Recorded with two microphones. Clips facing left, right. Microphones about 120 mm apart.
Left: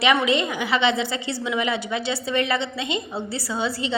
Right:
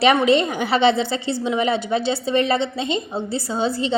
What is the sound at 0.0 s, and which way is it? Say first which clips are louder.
A woman's voice: right 4 dB; 35° right (ahead or behind).